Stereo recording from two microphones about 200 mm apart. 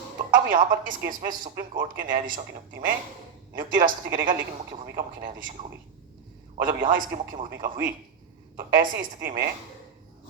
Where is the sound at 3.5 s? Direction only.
45° right (ahead or behind).